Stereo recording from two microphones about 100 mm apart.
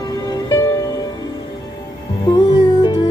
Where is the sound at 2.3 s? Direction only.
50° left (ahead or behind).